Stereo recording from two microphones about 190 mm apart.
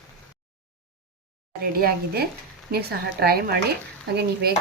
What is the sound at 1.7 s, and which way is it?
A woman's voice, 50° right (ahead or behind).